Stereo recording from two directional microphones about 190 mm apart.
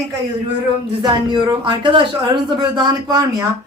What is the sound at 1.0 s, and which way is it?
Speech, 20° right (ahead or behind).